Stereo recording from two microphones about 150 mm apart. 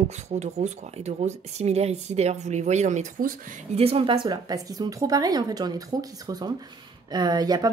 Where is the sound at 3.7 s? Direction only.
40° right (ahead or behind).